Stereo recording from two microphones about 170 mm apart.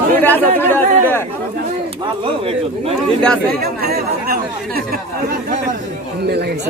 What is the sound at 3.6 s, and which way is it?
Speech, 65° right (ahead or behind).